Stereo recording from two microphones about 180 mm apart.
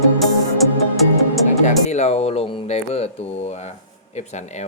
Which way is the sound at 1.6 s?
40° left (ahead or behind).